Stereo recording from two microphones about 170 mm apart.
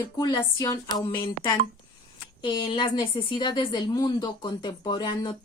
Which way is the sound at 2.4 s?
30° left (ahead or behind).